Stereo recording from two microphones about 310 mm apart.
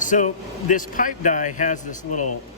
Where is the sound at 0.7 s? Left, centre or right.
Left.